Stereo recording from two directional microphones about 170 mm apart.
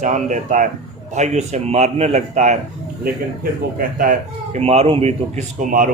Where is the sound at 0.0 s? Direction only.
45° right (ahead or behind).